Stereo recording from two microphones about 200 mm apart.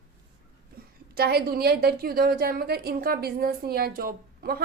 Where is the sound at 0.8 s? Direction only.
50° right (ahead or behind).